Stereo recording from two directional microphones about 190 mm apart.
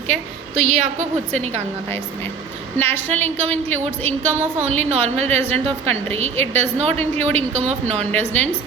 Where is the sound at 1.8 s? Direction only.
10° left (ahead or behind).